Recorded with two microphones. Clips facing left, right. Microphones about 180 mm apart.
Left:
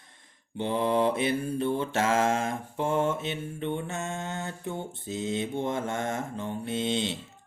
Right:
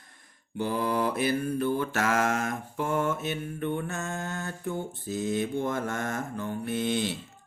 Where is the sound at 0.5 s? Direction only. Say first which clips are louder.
Left 2 dB; 25° left (ahead or behind).